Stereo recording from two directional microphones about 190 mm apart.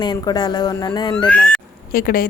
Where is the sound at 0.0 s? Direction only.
20° left (ahead or behind).